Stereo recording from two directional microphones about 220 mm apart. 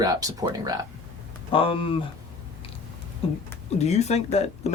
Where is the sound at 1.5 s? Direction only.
25° left (ahead or behind).